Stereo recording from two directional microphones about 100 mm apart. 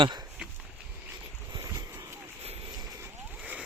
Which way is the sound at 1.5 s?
35° right (ahead or behind).